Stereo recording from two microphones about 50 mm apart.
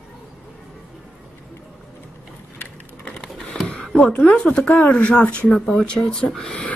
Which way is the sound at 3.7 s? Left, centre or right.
Centre.